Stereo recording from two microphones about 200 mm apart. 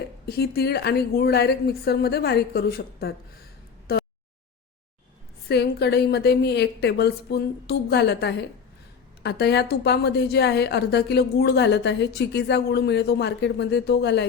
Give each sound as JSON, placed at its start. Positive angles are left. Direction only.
{"t": 0.3, "sound": "a woman's voice", "side_deg": 50}
{"t": 3.9, "sound": "a sound", "side_deg": 50}
{"t": 5.5, "sound": "a woman's voice", "side_deg": 55}